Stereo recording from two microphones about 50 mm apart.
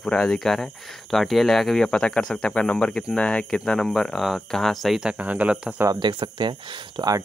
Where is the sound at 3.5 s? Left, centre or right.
Centre.